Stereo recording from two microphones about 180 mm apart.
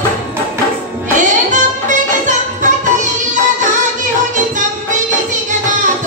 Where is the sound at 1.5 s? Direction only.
45° right (ahead or behind).